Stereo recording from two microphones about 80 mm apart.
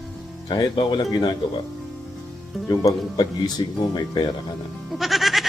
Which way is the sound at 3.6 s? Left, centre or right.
Left.